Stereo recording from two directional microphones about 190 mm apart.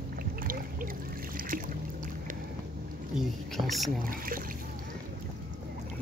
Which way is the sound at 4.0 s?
50° right (ahead or behind).